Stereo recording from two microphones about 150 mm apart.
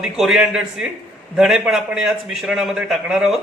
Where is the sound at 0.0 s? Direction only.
5° right (ahead or behind).